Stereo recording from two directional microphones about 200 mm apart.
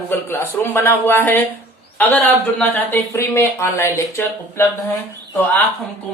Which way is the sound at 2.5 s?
10° left (ahead or behind).